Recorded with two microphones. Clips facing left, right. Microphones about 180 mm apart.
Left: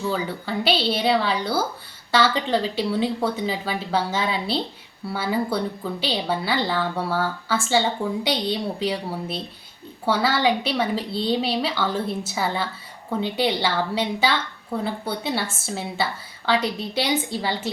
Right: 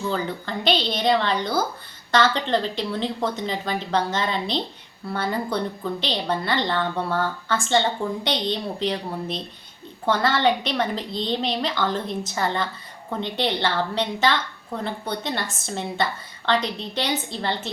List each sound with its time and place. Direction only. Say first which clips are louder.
0.1 s a woman's voice: left 1 dB; 5° left (ahead or behind)